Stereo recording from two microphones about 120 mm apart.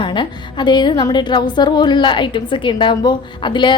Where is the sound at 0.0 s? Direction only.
40° left (ahead or behind).